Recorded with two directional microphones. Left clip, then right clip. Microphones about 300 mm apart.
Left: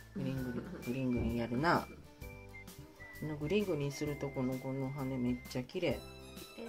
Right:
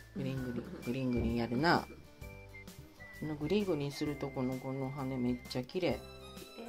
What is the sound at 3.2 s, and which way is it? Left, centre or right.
Speech, centre.